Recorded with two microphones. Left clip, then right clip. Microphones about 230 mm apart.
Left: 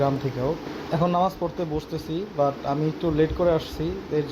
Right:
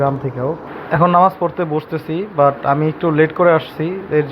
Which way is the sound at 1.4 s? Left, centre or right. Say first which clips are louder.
Right 10 dB; right.